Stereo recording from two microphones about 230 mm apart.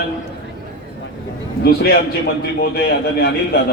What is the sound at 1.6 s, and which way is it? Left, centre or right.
Speech, left.